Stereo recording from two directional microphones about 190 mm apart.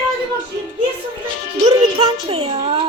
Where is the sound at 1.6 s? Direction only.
30° right (ahead or behind).